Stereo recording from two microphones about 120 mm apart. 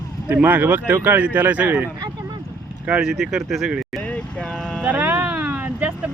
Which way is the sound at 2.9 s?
5° right (ahead or behind).